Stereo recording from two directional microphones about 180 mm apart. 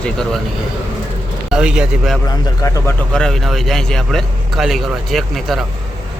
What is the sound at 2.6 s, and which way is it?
Speech, 15° left (ahead or behind).